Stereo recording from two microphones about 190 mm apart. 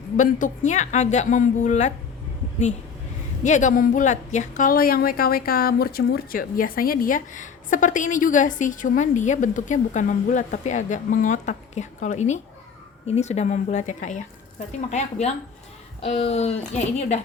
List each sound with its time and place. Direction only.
0.2 s a woman's voice: 40° left (ahead or behind)
3.4 s a woman's voice: 40° left (ahead or behind)